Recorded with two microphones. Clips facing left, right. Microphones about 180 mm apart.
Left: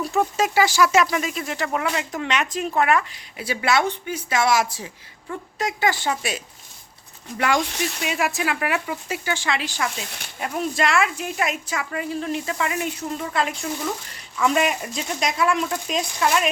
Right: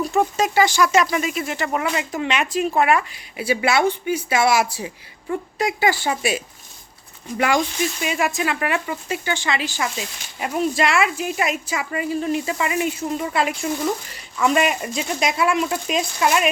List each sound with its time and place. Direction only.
0.1 s speech: centre (ahead or behind)
7.8 s speech: 70° left (ahead or behind)
8.0 s speech: centre (ahead or behind)